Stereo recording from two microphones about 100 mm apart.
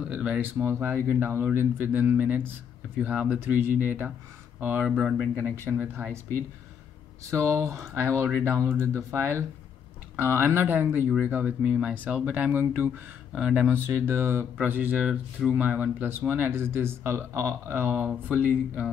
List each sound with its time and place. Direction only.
0.1 s a sound: 10° right (ahead or behind)
0.6 s speech: 25° right (ahead or behind)
3.3 s speech: 20° right (ahead or behind)
7.2 s speech: 30° right (ahead or behind); by 13.7 s 15° right (ahead or behind)
13.8 s speech: 25° right (ahead or behind)